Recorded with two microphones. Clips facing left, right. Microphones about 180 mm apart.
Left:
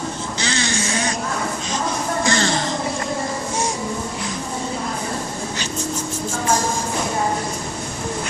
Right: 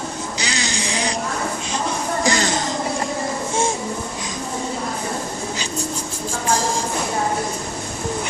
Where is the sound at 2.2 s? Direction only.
15° right (ahead or behind).